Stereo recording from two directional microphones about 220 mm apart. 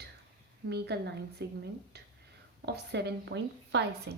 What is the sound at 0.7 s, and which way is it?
A woman's voice, 50° right (ahead or behind).